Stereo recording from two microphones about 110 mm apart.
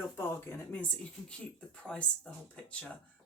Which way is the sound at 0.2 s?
20° left (ahead or behind).